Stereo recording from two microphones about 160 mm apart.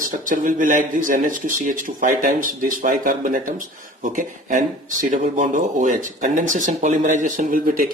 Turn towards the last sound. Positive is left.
turn(degrees=-55)  # may be behind; listen again after turning